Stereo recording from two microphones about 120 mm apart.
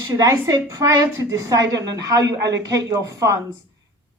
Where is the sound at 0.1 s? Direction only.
30° right (ahead or behind).